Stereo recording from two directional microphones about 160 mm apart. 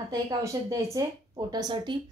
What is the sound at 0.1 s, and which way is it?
Speech, 20° right (ahead or behind).